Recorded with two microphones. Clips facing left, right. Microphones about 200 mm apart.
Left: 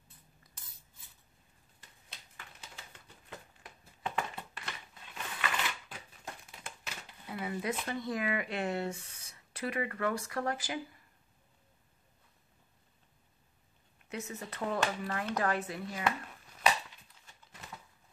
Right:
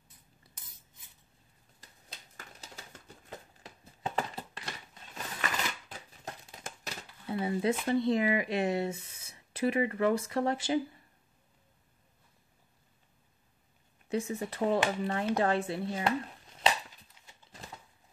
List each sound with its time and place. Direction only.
2.3 s typewriter: 40° right (ahead or behind)
4.0 s a sound: 35° right (ahead or behind)
7.9 s speech: 25° right (ahead or behind)
14.0 s speech: 30° right (ahead or behind)